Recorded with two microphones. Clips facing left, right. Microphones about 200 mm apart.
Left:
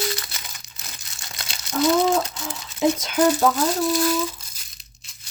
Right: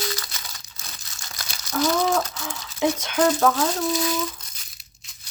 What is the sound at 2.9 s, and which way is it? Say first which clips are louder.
Speech: left 2 dB; 10° left (ahead or behind).